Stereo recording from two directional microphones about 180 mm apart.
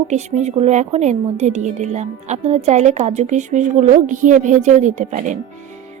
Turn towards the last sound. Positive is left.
turn(degrees=-45)  # may be behind; listen again after turning